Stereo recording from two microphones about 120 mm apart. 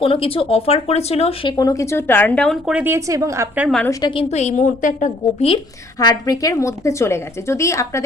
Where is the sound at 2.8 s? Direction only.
25° right (ahead or behind).